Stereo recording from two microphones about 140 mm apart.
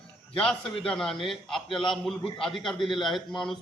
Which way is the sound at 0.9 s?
5° left (ahead or behind).